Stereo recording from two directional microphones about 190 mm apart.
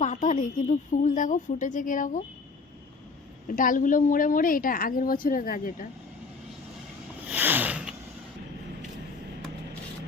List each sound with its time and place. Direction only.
0.0 s a woman's voice: 40° left (ahead or behind)
3.4 s a woman's voice: 45° left (ahead or behind)
7.3 s a sound: 10° right (ahead or behind)